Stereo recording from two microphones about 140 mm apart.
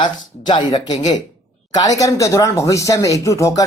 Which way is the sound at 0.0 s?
35° left (ahead or behind).